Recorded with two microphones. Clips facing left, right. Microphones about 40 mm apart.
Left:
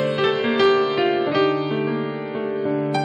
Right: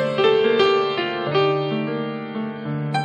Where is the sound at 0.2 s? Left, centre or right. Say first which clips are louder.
Right 4 dB; centre.